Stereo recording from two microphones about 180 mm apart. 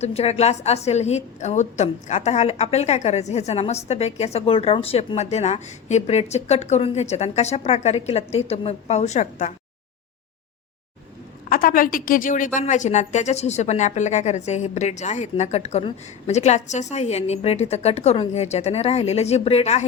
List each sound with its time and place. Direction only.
0.0 s a woman's voice: 35° left (ahead or behind)
11.4 s a woman's voice: 55° left (ahead or behind); by 19.8 s 35° left (ahead or behind)